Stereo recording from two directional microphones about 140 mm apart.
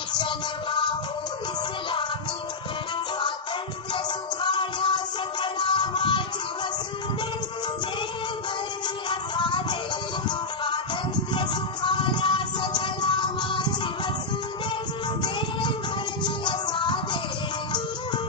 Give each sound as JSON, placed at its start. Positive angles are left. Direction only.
{"t": 0.2, "sound": "music", "side_deg": 35}
{"t": 3.9, "sound": "music", "side_deg": 35}
{"t": 9.0, "sound": "music", "side_deg": 35}
{"t": 15.2, "sound": "music", "side_deg": 35}